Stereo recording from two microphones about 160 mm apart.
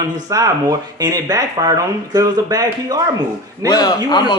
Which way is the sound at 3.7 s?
25° left (ahead or behind).